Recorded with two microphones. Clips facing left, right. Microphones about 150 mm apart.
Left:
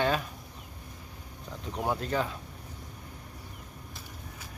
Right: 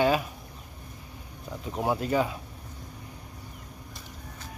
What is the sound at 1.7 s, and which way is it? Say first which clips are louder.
Speech: right 4 dB; 10° right (ahead or behind).